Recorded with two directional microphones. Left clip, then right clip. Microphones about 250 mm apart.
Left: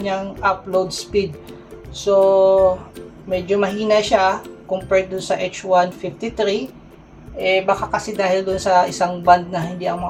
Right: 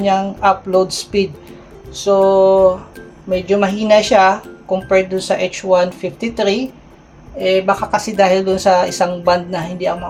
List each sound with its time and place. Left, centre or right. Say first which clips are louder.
0.0 s speech: right 6 dB; right